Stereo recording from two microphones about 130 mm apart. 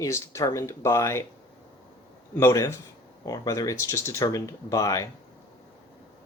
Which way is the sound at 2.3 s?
20° left (ahead or behind).